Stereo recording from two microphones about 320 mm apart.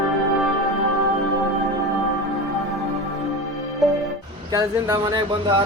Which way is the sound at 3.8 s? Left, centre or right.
Centre.